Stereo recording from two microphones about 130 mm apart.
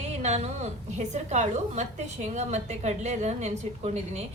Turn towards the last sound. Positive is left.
turn(degrees=-55)  # may be behind; listen again after turning